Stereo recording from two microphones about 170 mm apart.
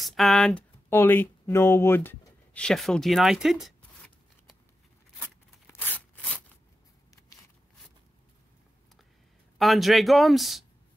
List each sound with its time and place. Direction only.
0.0 s speech: centre (ahead or behind)
5.2 s a sound: 10° left (ahead or behind)
9.6 s speech: centre (ahead or behind)